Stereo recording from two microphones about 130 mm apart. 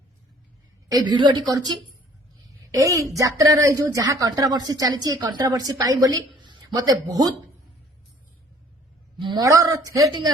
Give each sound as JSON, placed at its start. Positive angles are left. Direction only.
{"t": 0.9, "sound": "a woman's voice", "side_deg": -35}
{"t": 2.7, "sound": "a woman's voice", "side_deg": -25}
{"t": 9.1, "sound": "speech", "side_deg": -35}